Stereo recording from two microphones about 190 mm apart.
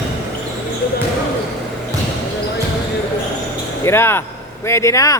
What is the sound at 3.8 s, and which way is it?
Speech, 10° left (ahead or behind).